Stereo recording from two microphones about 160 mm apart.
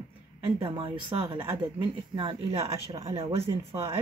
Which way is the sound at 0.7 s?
30° right (ahead or behind).